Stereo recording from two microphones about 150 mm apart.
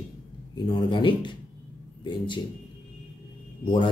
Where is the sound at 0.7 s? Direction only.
35° left (ahead or behind).